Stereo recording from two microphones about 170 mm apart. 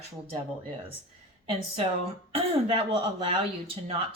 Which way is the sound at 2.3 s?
35° right (ahead or behind).